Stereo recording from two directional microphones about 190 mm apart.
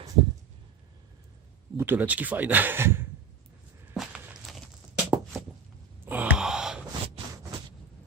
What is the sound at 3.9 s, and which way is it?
Whip, centre (ahead or behind).